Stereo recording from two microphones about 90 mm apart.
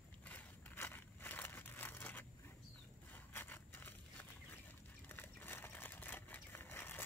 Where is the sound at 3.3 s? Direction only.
25° left (ahead or behind).